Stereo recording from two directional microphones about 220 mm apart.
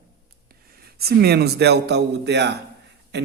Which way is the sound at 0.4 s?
45° right (ahead or behind).